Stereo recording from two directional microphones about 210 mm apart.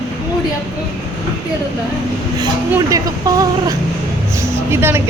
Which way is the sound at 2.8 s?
15° right (ahead or behind).